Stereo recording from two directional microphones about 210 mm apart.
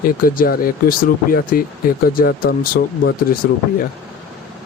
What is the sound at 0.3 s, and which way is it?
Speech, 45° left (ahead or behind).